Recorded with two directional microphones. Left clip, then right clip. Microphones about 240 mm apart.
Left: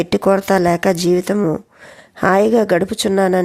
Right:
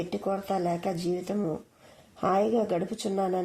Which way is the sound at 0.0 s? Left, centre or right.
Left.